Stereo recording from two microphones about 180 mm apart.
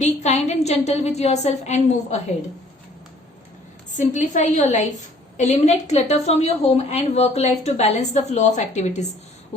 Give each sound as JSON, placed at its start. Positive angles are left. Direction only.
{"t": 0.0, "sound": "a woman's voice", "side_deg": 40}
{"t": 3.9, "sound": "a woman's voice", "side_deg": 45}